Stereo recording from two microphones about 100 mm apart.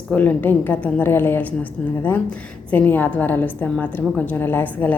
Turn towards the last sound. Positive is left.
turn(degrees=15)  # may be behind; listen again after turning